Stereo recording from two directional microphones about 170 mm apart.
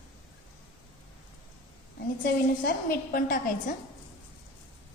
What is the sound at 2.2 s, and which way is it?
A woman's voice, 60° left (ahead or behind).